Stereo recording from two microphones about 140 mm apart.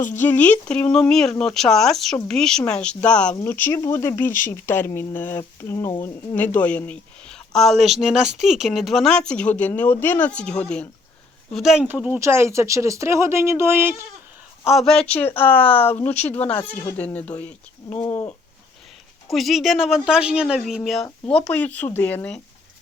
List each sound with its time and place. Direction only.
0.1 s speech: 15° left (ahead or behind); by 12.2 s 10° right (ahead or behind)
12.2 s speech: 20° right (ahead or behind)
14.6 s speech: centre (ahead or behind)
19.3 s speech: centre (ahead or behind)